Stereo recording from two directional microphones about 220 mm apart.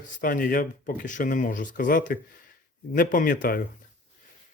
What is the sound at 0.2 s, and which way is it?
Speech, 40° left (ahead or behind).